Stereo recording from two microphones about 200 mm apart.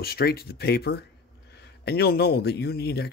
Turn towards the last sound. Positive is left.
turn(degrees=50)  # may be behind; listen again after turning